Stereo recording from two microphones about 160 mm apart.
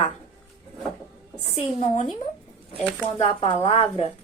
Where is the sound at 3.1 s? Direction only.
40° left (ahead or behind).